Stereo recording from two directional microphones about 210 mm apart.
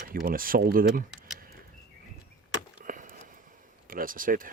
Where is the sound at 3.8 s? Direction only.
40° right (ahead or behind).